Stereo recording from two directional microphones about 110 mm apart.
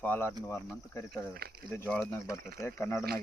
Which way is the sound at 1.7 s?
20° left (ahead or behind).